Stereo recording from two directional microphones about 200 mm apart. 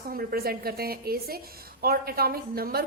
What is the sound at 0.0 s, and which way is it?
A woman's voice, 45° right (ahead or behind).